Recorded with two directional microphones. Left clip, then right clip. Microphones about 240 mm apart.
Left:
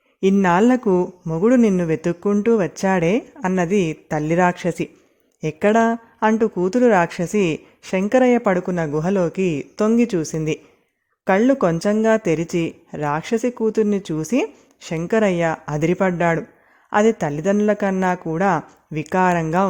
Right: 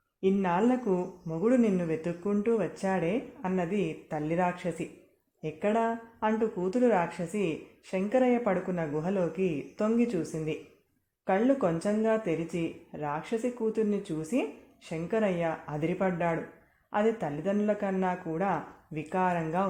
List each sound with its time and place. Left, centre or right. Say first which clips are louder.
0.2 s speech: left 11 dB; left